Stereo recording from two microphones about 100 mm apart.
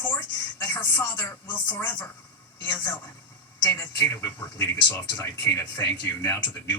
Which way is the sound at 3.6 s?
25° left (ahead or behind).